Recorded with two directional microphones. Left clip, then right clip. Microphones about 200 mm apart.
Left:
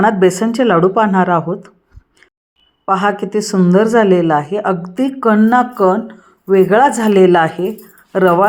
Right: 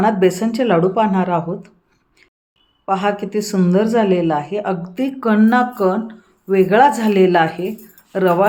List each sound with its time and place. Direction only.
0.0 s a woman's voice: 20° left (ahead or behind)
2.8 s a woman's voice: 15° left (ahead or behind)